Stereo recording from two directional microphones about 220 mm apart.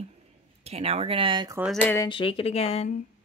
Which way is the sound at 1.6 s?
5° left (ahead or behind).